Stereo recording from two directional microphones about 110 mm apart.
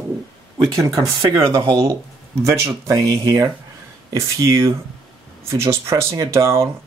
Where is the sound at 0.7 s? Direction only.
30° right (ahead or behind).